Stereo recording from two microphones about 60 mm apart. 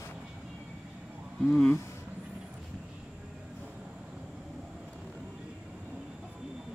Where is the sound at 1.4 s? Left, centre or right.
Centre.